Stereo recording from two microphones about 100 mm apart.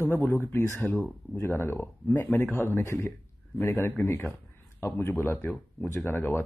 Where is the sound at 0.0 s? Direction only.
25° left (ahead or behind).